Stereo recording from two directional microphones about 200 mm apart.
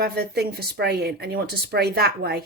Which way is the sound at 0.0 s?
55° right (ahead or behind).